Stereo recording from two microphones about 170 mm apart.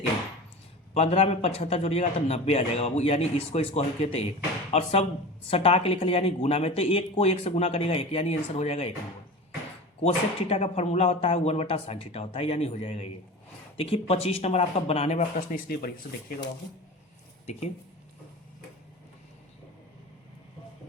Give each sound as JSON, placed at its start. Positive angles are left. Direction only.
{"t": 0.9, "sound": "speech", "side_deg": 35}
{"t": 10.0, "sound": "speech", "side_deg": 35}
{"t": 15.2, "sound": "speech", "side_deg": 55}